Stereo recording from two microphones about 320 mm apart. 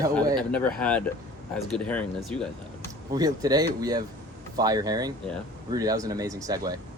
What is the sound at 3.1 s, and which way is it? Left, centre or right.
Speech, centre.